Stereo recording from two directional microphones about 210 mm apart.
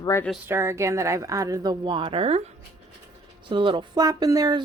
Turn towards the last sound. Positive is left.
turn(degrees=-20)  # may be behind; listen again after turning